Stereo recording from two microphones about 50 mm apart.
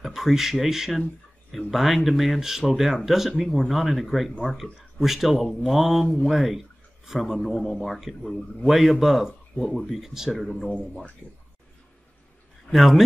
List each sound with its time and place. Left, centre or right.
0.0 s speech: centre
10.3 s speech: centre
11.2 s speech: left
12.7 s speech: centre